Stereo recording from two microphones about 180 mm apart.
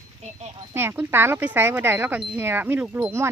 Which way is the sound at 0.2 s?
35° right (ahead or behind).